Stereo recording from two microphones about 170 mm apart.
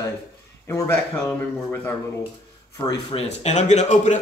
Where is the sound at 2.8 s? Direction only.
25° left (ahead or behind).